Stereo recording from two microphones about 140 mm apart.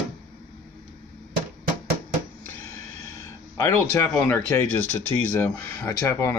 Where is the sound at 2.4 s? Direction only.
20° left (ahead or behind).